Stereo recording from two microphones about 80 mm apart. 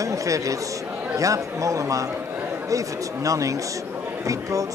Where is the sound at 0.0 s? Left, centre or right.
Right.